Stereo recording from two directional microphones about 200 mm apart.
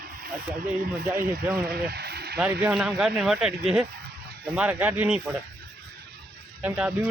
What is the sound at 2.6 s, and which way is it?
Speech, centre (ahead or behind).